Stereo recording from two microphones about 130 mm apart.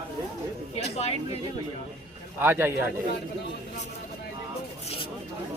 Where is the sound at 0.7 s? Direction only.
55° left (ahead or behind).